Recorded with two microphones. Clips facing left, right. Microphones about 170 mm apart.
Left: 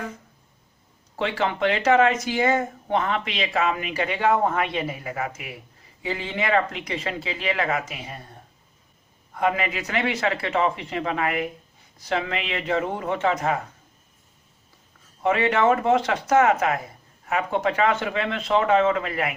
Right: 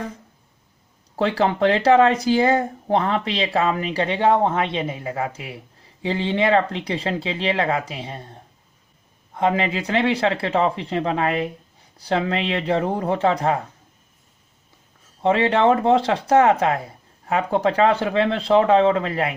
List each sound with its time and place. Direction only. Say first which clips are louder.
1.1 s speech: right 5 dB; 35° right (ahead or behind)
15.2 s speech: right 3 dB; 30° right (ahead or behind)